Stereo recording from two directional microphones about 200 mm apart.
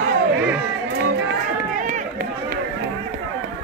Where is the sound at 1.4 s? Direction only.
40° right (ahead or behind).